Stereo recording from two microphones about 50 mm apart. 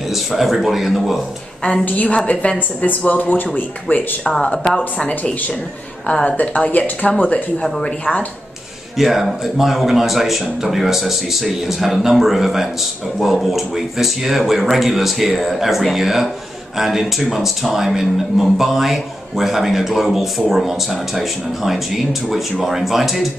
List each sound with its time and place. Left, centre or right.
0.1 s a man's voice: centre
1.6 s a woman's voice: centre
1.9 s speech: left
8.0 s speech: left
8.9 s a man's voice: centre